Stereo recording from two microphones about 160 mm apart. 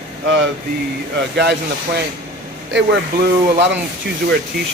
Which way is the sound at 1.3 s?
90° right.